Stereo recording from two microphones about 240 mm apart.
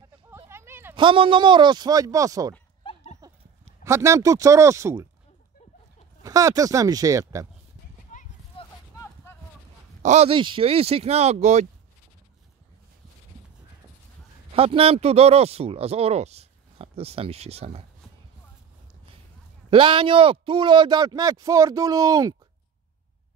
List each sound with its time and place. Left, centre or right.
0.4 s a sound: centre
0.9 s speech: right
2.8 s dog: left
3.8 s a man's voice: centre
6.2 s a man's voice: centre
8.1 s a sound: left
9.0 s a sound: centre
10.0 s speech: right
14.5 s speech: right
19.7 s a man's voice: right